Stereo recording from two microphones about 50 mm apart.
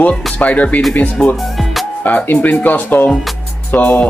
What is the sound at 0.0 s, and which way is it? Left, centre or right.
Speech, left.